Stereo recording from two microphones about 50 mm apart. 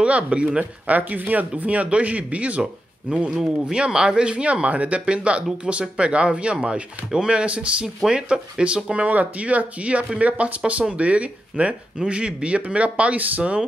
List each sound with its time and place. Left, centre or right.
0.0 s speech: right